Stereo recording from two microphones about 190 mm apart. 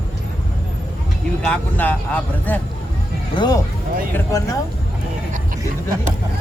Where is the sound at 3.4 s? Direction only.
20° left (ahead or behind).